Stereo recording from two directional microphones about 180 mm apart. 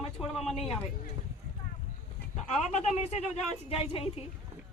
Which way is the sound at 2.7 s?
35° left (ahead or behind).